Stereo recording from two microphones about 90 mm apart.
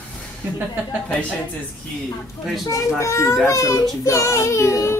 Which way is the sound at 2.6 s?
35° left (ahead or behind).